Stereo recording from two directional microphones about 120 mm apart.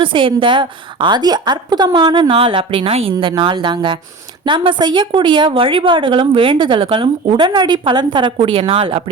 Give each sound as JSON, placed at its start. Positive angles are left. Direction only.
{"t": 0.0, "sound": "a woman's voice", "side_deg": -45}